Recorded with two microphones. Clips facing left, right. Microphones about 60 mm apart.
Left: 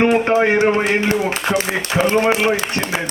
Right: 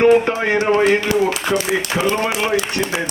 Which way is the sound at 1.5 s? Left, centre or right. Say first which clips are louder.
Left 1 dB; left.